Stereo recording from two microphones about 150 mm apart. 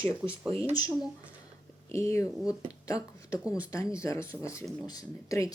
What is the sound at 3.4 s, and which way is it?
Speech, 10° right (ahead or behind).